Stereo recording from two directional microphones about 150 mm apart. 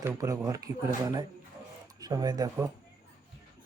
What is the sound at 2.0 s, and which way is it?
Speech, 25° right (ahead or behind).